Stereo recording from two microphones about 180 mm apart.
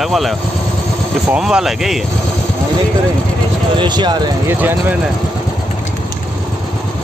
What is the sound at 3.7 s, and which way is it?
Speech, 25° right (ahead or behind).